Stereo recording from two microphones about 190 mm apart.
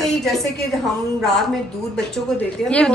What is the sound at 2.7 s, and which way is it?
Speech, 5° left (ahead or behind).